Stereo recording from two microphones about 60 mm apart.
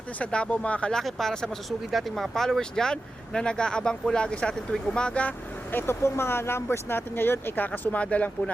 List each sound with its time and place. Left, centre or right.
0.2 s speech: centre
0.9 s speech: centre
5.7 s speech: left
7.9 s speech: left